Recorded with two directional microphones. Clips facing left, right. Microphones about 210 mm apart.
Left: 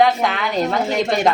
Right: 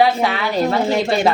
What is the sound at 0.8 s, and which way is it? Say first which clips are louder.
Speech: right 2 dB; 30° right (ahead or behind).